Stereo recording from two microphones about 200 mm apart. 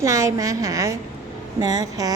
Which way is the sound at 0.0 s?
15° right (ahead or behind).